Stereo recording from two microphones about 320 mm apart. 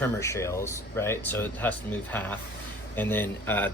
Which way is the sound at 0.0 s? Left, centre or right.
Centre.